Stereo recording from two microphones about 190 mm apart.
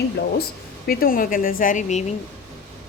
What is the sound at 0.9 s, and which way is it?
Speech, 50° left (ahead or behind).